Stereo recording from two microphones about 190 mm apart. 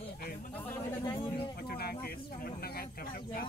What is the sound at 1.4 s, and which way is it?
Speech, 55° left (ahead or behind).